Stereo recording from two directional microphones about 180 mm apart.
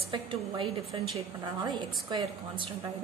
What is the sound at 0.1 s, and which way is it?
A woman's voice, 30° right (ahead or behind).